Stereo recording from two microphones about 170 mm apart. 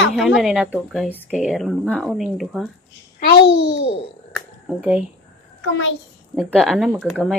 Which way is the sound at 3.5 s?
90° left.